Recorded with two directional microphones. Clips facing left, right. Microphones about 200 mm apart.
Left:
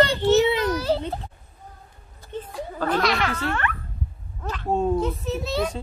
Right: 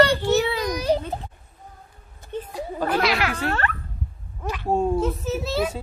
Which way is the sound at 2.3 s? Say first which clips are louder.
Right 2 dB; 15° right (ahead or behind).